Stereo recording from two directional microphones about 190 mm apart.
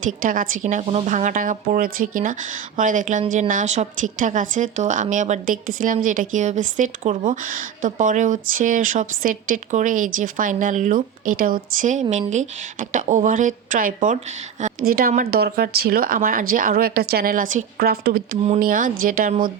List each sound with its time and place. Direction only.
0.0 s speech: 45° right (ahead or behind)
18.4 s speech: 40° right (ahead or behind)